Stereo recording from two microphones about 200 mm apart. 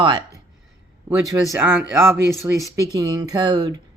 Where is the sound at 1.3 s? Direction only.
15° right (ahead or behind).